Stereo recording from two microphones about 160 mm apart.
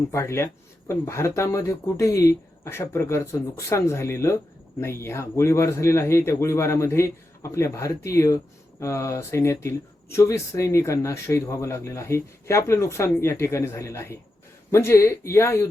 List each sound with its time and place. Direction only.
0.1 s speech: 15° left (ahead or behind)